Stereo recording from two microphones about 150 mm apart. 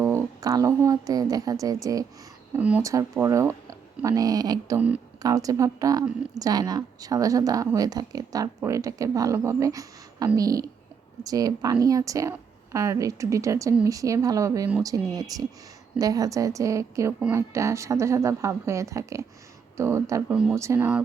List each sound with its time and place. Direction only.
0.0 s speech: 20° right (ahead or behind)
2.5 s speech: 10° right (ahead or behind)
2.8 s a woman's voice: 20° right (ahead or behind)
20.3 s speech: 5° right (ahead or behind)
20.6 s speech: 15° right (ahead or behind)